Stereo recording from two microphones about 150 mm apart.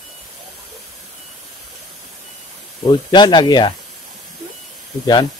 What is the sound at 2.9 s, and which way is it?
Speech, 30° left (ahead or behind).